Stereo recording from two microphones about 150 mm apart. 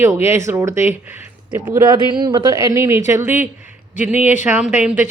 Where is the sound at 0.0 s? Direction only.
15° right (ahead or behind).